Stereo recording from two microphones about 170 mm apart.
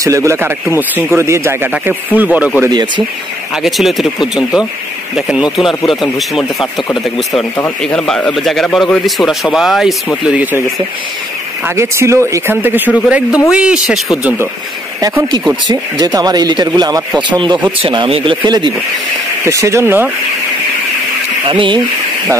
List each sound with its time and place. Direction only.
0.0 s a man's voice: 15° right (ahead or behind)
11.6 s a man's voice: 15° right (ahead or behind)
15.7 s speech: 20° right (ahead or behind)
19.4 s a man's voice: 15° right (ahead or behind)
21.5 s speech: 30° right (ahead or behind)